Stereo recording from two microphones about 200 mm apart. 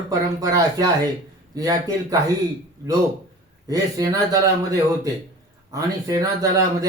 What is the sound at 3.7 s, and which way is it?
A man's voice, 20° right (ahead or behind).